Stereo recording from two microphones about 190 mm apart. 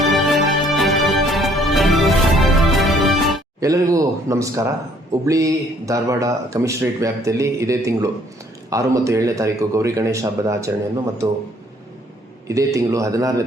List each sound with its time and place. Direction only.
0.1 s music: centre (ahead or behind)
3.6 s speech: 15° right (ahead or behind)
12.5 s speech: 15° right (ahead or behind)